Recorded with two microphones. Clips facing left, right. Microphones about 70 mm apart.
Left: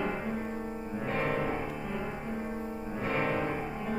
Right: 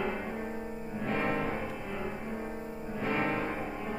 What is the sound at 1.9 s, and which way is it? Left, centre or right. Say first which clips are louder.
Music: left 1 dB; centre.